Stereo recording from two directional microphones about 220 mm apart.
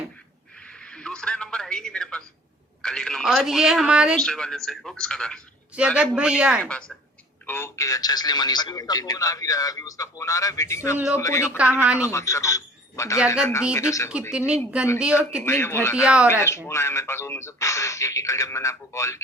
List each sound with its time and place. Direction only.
0.7 s a sound: 5° left (ahead or behind)
2.8 s speech: 5° left (ahead or behind)
11.5 s speech: 5° right (ahead or behind)
12.0 s a man's voice: 15° left (ahead or behind)
13.1 s speech: 5° right (ahead or behind)
13.4 s speech: 15° left (ahead or behind)
14.3 s speech: 5° right (ahead or behind)
15.4 s speech: 10° left (ahead or behind)
16.0 s speech: 5° right (ahead or behind)
16.3 s speech: 10° left (ahead or behind)